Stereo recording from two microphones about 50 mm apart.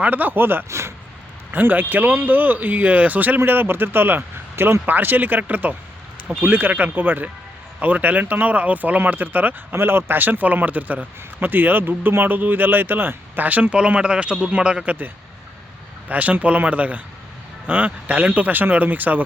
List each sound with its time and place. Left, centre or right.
0.0 s speech: right
0.7 s a sound: right
1.5 s speech: right
4.9 s speech: right
9.7 s speech: right; by 14.8 s centre
14.8 s speech: right